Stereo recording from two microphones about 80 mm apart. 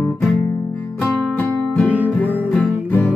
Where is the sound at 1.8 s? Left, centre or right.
Centre.